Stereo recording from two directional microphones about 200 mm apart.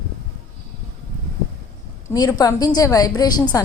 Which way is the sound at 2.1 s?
20° left (ahead or behind).